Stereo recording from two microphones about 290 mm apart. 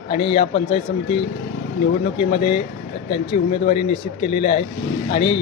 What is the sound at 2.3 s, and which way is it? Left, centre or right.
Speech, centre.